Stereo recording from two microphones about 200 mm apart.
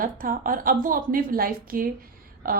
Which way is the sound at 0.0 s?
45° right (ahead or behind).